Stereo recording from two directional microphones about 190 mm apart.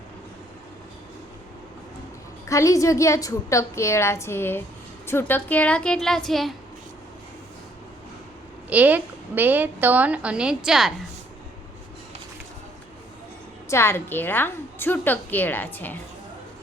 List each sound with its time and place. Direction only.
2.5 s a woman's voice: 15° left (ahead or behind); by 6.6 s centre (ahead or behind)
8.7 s a woman's voice: 10° right (ahead or behind)
13.7 s a woman's voice: 15° left (ahead or behind)